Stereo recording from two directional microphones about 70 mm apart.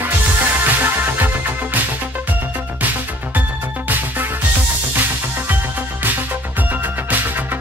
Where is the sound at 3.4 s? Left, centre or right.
Right.